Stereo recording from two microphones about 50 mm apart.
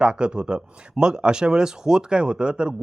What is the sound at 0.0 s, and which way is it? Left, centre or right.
Speech, centre.